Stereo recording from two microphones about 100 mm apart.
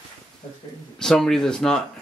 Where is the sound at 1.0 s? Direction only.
5° left (ahead or behind).